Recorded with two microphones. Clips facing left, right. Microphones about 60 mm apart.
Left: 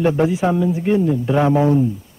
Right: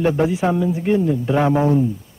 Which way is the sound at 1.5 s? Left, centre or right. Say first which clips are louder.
Left 2 dB; right.